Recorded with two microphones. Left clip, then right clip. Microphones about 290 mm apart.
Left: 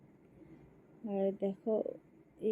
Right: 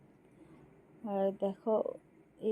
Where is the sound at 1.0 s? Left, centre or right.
Right.